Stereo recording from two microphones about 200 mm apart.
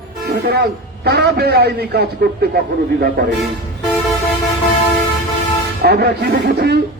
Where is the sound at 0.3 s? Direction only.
50° right (ahead or behind).